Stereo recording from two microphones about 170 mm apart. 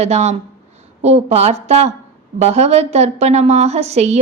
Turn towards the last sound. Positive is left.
turn(degrees=-40)  # may be behind; listen again after turning